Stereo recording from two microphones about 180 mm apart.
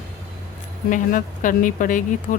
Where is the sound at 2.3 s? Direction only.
50° left (ahead or behind).